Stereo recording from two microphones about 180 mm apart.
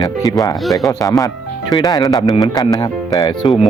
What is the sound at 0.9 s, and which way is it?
Speech, 20° left (ahead or behind).